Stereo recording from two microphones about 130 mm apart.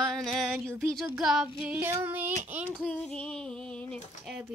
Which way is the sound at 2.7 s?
5° left (ahead or behind).